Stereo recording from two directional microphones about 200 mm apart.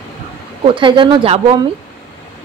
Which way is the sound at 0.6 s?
25° right (ahead or behind).